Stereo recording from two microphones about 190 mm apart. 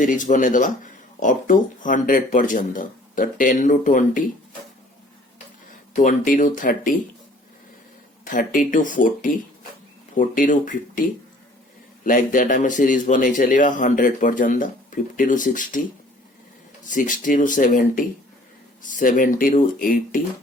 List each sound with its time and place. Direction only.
0.0 s speech: 40° left (ahead or behind)
6.0 s speech: 45° left (ahead or behind)
8.2 s speech: 45° left (ahead or behind)